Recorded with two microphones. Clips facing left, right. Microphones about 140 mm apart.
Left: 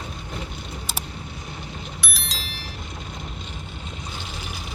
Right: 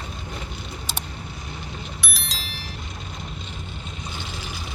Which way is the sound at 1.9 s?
Centre (ahead or behind).